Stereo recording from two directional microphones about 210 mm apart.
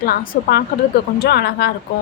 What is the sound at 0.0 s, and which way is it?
Speech, 45° left (ahead or behind).